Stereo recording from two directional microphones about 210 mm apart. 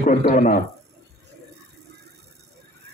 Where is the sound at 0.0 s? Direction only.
35° left (ahead or behind).